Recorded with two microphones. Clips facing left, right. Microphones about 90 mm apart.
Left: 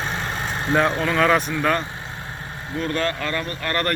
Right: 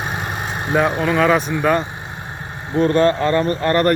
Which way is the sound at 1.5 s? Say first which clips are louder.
Right 4 dB; 15° right (ahead or behind).